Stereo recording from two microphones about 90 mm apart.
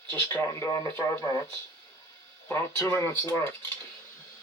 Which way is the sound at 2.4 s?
30° left (ahead or behind).